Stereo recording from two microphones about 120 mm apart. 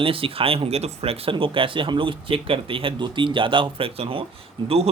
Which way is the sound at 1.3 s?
45° right (ahead or behind).